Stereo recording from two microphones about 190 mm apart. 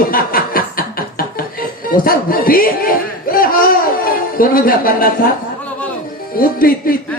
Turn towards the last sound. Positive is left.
turn(degrees=50)  # may be behind; listen again after turning